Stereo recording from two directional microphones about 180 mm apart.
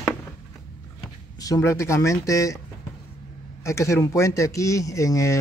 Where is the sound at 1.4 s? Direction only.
15° left (ahead or behind).